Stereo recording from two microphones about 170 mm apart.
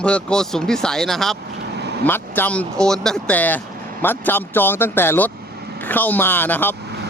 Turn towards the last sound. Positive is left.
turn(degrees=10)  # may be behind; listen again after turning